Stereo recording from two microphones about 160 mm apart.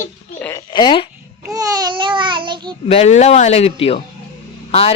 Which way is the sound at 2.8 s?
45° left (ahead or behind).